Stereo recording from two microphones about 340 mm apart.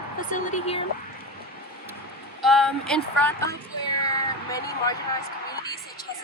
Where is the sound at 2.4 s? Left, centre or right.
Centre.